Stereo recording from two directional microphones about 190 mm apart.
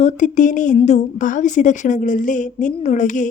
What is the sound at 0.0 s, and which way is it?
A woman's voice, 40° left (ahead or behind).